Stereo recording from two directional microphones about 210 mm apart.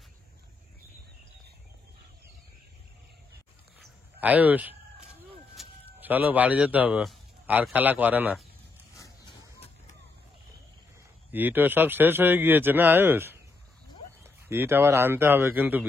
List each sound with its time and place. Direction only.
4.2 s speech: 5° right (ahead or behind)
11.3 s speech: 10° right (ahead or behind)
14.5 s speech: 10° right (ahead or behind)